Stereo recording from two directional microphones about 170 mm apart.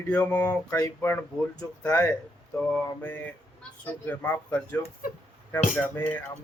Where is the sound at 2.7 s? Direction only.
10° left (ahead or behind).